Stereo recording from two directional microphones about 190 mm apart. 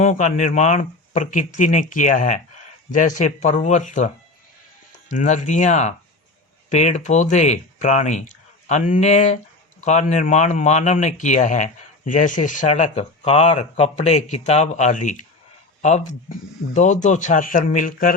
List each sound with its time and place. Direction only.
0.0 s a man's voice: 40° left (ahead or behind)